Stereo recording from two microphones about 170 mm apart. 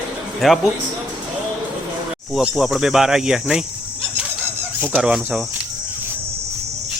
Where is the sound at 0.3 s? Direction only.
Centre (ahead or behind).